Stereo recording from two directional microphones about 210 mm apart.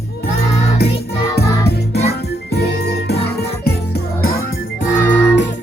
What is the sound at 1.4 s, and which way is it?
Music, 50° left (ahead or behind).